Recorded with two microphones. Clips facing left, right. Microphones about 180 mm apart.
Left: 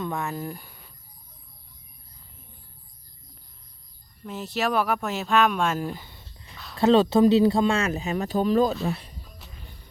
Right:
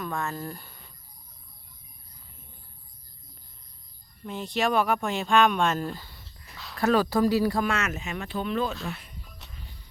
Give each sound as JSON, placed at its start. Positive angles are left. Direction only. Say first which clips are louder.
{"t": 0.0, "sound": "speech", "louder": "left 2 dB", "side_deg": 15}
{"t": 4.2, "sound": "speech", "louder": "even", "side_deg": 5}
{"t": 6.5, "sound": "a sound", "louder": "even", "side_deg": 0}
{"t": 6.7, "sound": "speech", "louder": "left 5 dB", "side_deg": 25}